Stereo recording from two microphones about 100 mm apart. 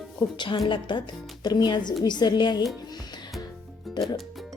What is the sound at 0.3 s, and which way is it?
A woman's voice, 50° left (ahead or behind).